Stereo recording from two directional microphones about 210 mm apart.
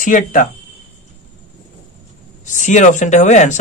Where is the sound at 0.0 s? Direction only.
40° left (ahead or behind).